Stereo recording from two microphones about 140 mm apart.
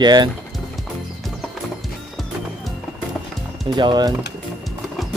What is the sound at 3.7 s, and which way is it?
Speech, 30° right (ahead or behind).